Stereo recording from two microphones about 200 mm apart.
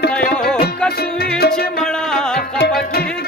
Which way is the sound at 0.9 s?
50° left (ahead or behind).